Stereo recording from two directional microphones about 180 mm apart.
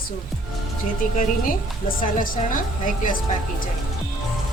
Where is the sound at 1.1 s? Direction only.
50° left (ahead or behind).